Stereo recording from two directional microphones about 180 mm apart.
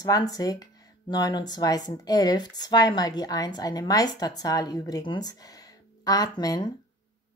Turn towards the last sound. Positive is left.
turn(degrees=20)  # may be behind; listen again after turning